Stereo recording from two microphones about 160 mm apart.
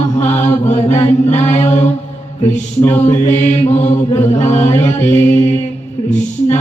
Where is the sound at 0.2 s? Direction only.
45° left (ahead or behind).